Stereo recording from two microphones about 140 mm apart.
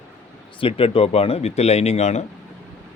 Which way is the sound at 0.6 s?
40° left (ahead or behind).